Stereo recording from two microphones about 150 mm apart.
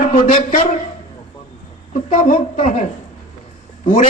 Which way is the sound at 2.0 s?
60° left (ahead or behind).